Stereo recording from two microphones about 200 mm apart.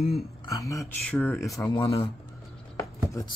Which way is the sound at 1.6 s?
15° left (ahead or behind).